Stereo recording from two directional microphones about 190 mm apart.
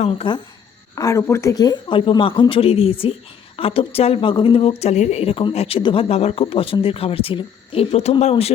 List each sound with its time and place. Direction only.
0.0 s speech: 30° left (ahead or behind)
0.9 s speech: 15° left (ahead or behind); by 8.5 s 35° left (ahead or behind)